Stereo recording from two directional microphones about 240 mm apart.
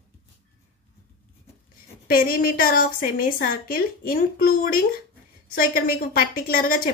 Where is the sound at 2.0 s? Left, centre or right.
Left.